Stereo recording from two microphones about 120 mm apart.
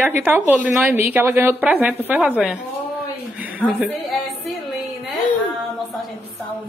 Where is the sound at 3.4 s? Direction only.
15° right (ahead or behind).